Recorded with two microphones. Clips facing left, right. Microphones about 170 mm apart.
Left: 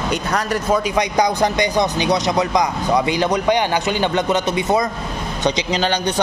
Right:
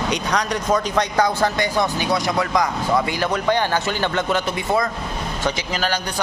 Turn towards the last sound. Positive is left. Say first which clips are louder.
# left 4 dB
turn(degrees=20)  # may be behind; listen again after turning